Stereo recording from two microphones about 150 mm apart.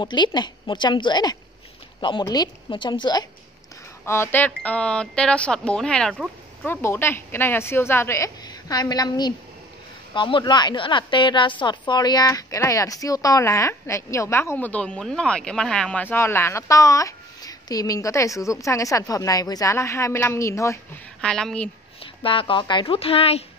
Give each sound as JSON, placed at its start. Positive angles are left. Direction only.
{"t": 0.0, "sound": "a woman's voice", "side_deg": 30}
{"t": 4.0, "sound": "a woman's voice", "side_deg": 15}
{"t": 6.6, "sound": "a woman's voice", "side_deg": 15}
{"t": 21.2, "sound": "a woman's voice", "side_deg": 5}
{"t": 22.0, "sound": "speech", "side_deg": 35}